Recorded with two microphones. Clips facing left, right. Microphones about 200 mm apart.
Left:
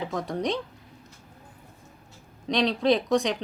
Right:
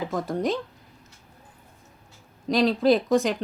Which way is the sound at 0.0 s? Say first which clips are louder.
Right 2 dB; centre (ahead or behind).